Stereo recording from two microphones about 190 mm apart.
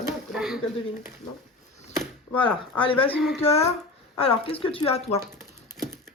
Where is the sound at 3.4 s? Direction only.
35° left (ahead or behind).